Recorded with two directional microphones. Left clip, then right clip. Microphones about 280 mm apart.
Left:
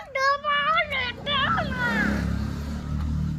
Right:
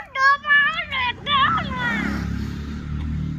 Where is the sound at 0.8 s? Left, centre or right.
Centre.